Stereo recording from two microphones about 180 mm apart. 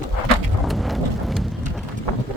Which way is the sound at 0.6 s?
Centre (ahead or behind).